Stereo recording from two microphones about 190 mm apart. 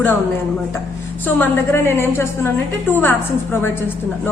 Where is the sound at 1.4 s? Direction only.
15° left (ahead or behind).